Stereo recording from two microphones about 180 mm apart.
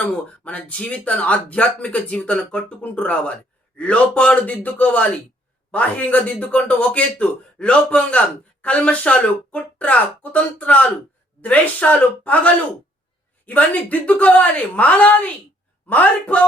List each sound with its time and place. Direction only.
0.4 s speech: 5° left (ahead or behind)